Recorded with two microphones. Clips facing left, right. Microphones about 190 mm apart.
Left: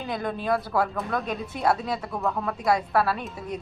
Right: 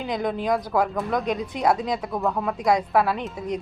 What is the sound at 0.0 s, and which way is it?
Speech, 15° right (ahead or behind).